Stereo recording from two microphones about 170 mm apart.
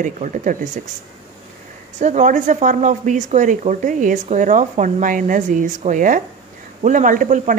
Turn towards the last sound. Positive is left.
turn(degrees=-50)  # may be behind; listen again after turning